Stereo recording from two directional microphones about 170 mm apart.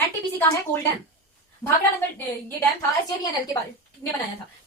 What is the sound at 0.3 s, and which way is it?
Speech, 10° left (ahead or behind).